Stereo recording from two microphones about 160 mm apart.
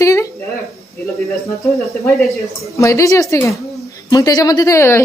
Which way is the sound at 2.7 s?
20° left (ahead or behind).